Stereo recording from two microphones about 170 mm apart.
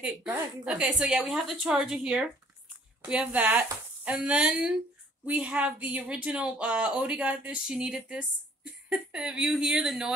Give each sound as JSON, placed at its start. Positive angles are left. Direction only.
{"t": 0.0, "sound": "a woman's voice", "side_deg": -5}